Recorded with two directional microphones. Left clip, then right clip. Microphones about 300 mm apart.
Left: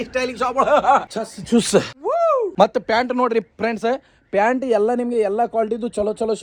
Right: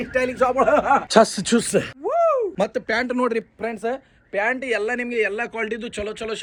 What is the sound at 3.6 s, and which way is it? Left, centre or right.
Speech, left.